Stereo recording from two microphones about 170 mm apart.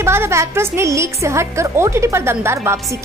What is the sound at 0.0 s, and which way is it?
A woman's voice, 15° right (ahead or behind).